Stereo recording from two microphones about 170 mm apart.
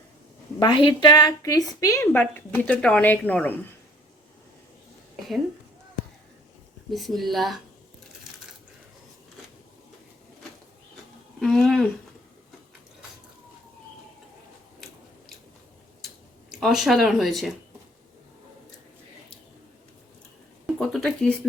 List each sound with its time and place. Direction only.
0.6 s a woman's voice: 30° left (ahead or behind); by 3.5 s 10° left (ahead or behind)
6.9 s speech: centre (ahead or behind)
11.3 s speech: centre (ahead or behind)
16.5 s speech: centre (ahead or behind)
20.7 s speech: 5° left (ahead or behind)